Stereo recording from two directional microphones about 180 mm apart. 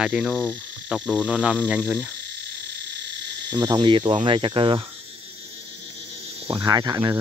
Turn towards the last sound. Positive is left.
turn(degrees=-20)  # may be behind; listen again after turning